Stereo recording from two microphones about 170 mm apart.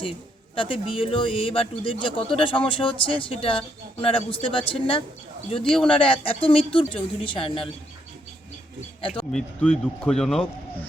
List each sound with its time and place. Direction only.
0.5 s a man's voice: 30° left (ahead or behind)
5.6 s speech: 5° left (ahead or behind)
6.0 s a man's voice: 30° left (ahead or behind)
9.0 s a sound: 30° left (ahead or behind)
9.3 s speech: 5° left (ahead or behind)